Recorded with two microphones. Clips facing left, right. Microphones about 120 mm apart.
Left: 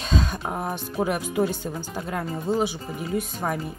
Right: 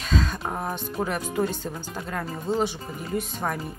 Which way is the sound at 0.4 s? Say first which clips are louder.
Left 1 dB; 5° left (ahead or behind).